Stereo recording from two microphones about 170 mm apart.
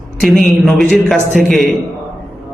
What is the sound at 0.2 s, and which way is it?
A man's voice, centre (ahead or behind).